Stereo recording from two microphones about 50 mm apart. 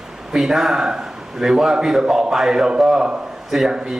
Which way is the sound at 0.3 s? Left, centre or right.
Centre.